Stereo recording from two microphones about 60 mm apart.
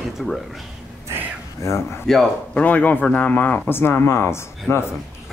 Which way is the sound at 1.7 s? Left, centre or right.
Left.